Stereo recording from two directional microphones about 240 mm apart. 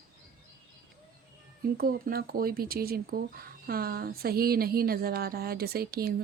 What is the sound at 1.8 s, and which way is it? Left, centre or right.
Speech, right.